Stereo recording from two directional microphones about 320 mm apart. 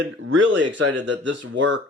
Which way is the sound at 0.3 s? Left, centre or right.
Right.